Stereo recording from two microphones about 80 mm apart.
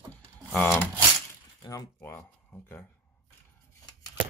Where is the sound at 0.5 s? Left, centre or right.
Left.